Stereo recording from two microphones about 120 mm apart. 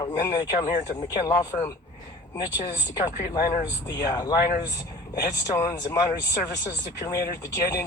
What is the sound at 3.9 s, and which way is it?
Speech, 35° left (ahead or behind).